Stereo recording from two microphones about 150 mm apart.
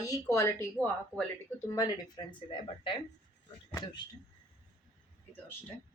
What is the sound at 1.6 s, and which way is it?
Speech, 25° left (ahead or behind).